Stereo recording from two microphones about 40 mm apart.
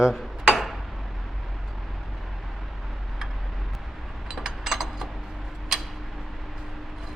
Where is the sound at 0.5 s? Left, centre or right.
Centre.